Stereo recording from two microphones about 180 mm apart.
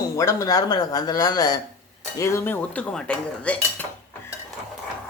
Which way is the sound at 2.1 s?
15° left (ahead or behind).